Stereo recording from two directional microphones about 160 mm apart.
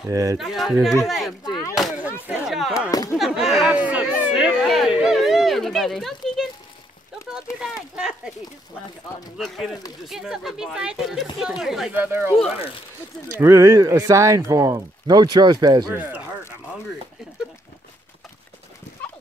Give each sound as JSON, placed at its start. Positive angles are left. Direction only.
{"t": 0.1, "sound": "speech", "side_deg": -20}
{"t": 0.4, "sound": "speech", "side_deg": 0}
{"t": 1.4, "sound": "a sound", "side_deg": 25}
{"t": 1.9, "sound": "a sound", "side_deg": -10}
{"t": 2.9, "sound": "speech", "side_deg": 25}
{"t": 3.2, "sound": "speech", "side_deg": 0}
{"t": 7.6, "sound": "speech", "side_deg": -5}
{"t": 9.4, "sound": "speech", "side_deg": 0}
{"t": 13.4, "sound": "speech", "side_deg": -20}
{"t": 15.9, "sound": "speech", "side_deg": -10}